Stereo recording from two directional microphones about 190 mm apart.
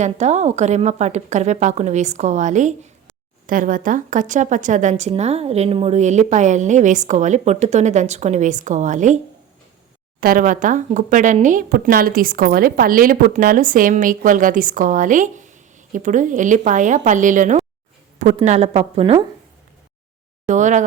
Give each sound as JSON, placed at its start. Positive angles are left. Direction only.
{"t": 0.0, "sound": "a woman's voice", "side_deg": -35}
{"t": 20.5, "sound": "a woman's voice", "side_deg": -40}